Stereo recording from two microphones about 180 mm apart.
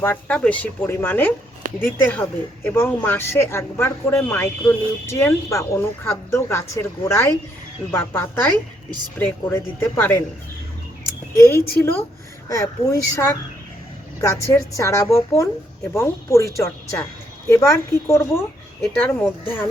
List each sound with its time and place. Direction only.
0.0 s a woman's voice: 10° left (ahead or behind)
11.3 s a woman's voice: 15° left (ahead or behind)